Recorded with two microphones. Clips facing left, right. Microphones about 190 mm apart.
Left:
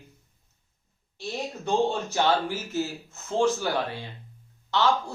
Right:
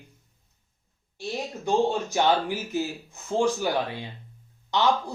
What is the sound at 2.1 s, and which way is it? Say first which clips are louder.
Speech: right 1 dB; 15° right (ahead or behind).